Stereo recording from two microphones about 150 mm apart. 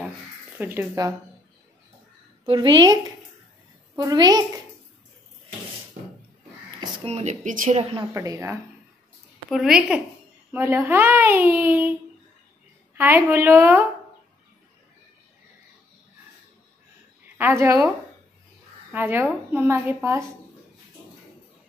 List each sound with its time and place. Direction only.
0.6 s a child's voice: 15° right (ahead or behind)
2.4 s a woman's voice: 35° right (ahead or behind)
7.1 s speech: 45° right (ahead or behind)
7.4 s a woman's voice: 65° right (ahead or behind)
7.7 s a woman's voice: 40° right (ahead or behind)
8.1 s a woman's voice: 20° right (ahead or behind)
9.5 s a woman's voice: 5° right (ahead or behind)
12.9 s a child's voice: 15° right (ahead or behind)
17.4 s a child's voice: 15° right (ahead or behind)